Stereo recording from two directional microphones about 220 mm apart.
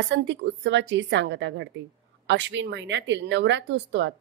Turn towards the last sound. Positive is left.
turn(degrees=-55)  # may be behind; listen again after turning